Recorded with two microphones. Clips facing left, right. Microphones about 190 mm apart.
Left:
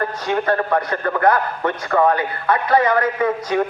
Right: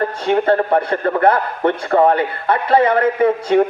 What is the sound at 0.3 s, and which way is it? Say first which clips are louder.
A man's voice: right 5 dB; 25° right (ahead or behind).